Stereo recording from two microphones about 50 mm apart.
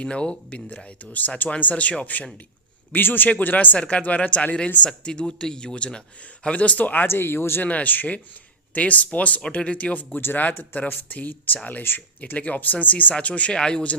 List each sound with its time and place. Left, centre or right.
0.0 s speech: centre
2.9 s speech: left
7.1 s speech: left
7.6 s speech: left
10.2 s speech: left; by 13.9 s centre